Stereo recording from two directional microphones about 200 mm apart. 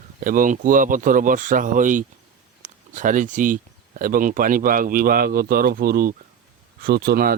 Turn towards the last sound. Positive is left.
turn(degrees=-50)  # may be behind; listen again after turning